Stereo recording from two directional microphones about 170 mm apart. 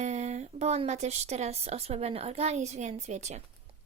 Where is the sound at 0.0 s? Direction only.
40° right (ahead or behind).